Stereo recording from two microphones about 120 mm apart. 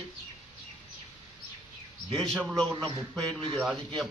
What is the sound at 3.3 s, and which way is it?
Speech, 45° right (ahead or behind).